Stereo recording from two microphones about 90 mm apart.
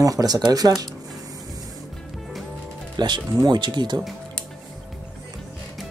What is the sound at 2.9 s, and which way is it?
Speech, 55° right (ahead or behind).